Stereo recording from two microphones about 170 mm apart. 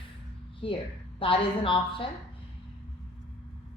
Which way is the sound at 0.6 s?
30° left (ahead or behind).